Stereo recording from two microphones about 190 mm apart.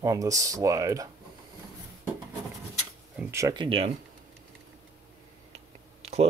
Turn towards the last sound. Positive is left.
turn(degrees=-35)  # may be behind; listen again after turning